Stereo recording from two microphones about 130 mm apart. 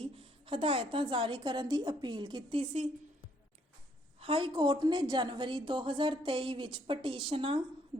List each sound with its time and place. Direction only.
0.0 s a woman's voice: 45° right (ahead or behind)
4.2 s a woman's voice: 45° right (ahead or behind)